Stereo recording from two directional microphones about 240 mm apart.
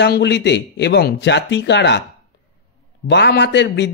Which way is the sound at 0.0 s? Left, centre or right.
Left.